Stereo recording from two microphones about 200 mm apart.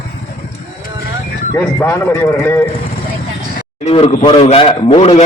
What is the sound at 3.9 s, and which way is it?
A man's voice, 30° left (ahead or behind).